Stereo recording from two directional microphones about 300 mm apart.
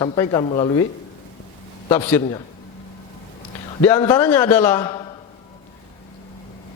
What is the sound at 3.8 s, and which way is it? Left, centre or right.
A man's voice, centre.